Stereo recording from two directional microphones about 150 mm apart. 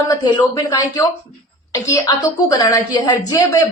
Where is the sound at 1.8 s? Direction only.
20° left (ahead or behind).